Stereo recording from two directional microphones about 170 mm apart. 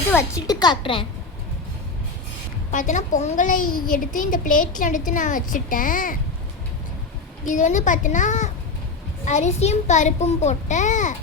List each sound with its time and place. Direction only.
0.1 s a woman's voice: 15° left (ahead or behind)
2.7 s a woman's voice: 50° left (ahead or behind)
7.4 s a woman's voice: 45° left (ahead or behind)